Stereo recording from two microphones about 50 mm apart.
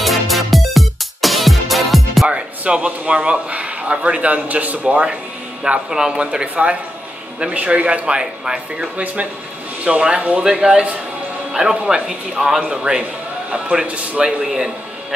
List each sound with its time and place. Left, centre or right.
0.0 s music: centre
2.2 s speech: right
6.4 s speech: right
8.2 s speech: centre
8.9 s speech: right
14.2 s a man's voice: centre